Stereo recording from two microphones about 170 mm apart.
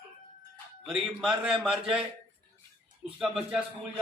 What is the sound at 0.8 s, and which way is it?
A man's voice, 5° right (ahead or behind).